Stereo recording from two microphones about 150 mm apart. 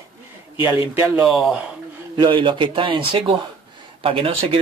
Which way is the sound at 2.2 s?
35° right (ahead or behind).